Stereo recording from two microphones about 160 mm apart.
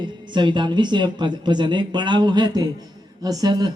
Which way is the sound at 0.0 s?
30° right (ahead or behind).